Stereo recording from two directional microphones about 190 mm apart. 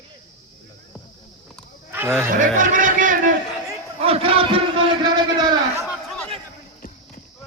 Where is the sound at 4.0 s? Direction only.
30° right (ahead or behind).